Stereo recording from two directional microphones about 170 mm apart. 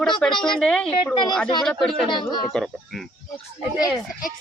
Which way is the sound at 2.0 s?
25° left (ahead or behind).